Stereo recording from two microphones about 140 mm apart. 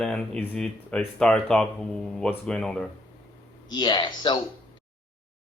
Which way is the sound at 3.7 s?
35° left (ahead or behind).